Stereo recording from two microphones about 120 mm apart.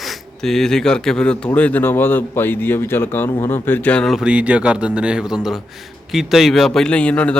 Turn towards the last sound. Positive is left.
turn(degrees=10)  # may be behind; listen again after turning